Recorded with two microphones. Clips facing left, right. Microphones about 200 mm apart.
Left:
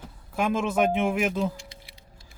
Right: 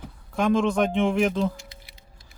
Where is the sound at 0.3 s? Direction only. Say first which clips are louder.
Right 3 dB; 5° left (ahead or behind).